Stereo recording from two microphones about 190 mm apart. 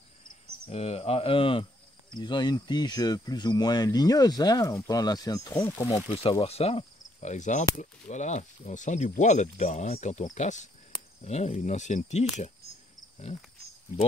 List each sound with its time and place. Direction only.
0.7 s speech: 35° left (ahead or behind); by 6.0 s 15° left (ahead or behind)
6.0 s speech: 30° left (ahead or behind)